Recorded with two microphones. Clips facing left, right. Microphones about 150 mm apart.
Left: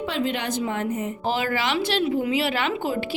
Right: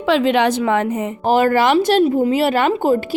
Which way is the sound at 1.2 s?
50° right (ahead or behind).